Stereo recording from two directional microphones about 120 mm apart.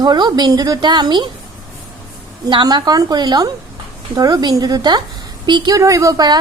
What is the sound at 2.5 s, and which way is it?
A woman's voice, 40° right (ahead or behind).